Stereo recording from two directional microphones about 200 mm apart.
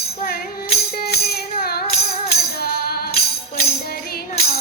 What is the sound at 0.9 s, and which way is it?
Music, 50° left (ahead or behind).